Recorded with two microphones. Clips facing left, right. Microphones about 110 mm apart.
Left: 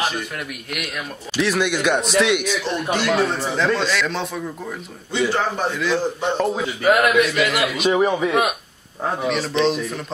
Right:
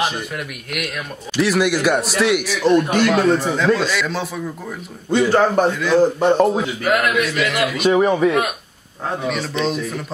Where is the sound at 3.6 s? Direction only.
5° right (ahead or behind).